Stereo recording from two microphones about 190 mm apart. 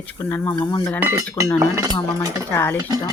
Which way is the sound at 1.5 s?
15° right (ahead or behind).